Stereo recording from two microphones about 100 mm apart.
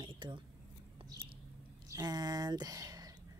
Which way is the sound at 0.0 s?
50° right (ahead or behind).